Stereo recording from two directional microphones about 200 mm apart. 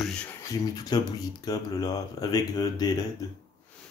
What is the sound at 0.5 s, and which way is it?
Speech, 20° left (ahead or behind).